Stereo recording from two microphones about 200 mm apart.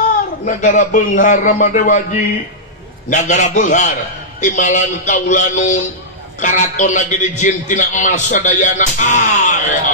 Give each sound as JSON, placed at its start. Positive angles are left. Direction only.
{"t": 0.5, "sound": "a man's voice", "side_deg": 40}